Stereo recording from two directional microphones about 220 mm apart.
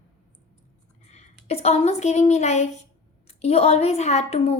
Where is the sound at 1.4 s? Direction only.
30° left (ahead or behind).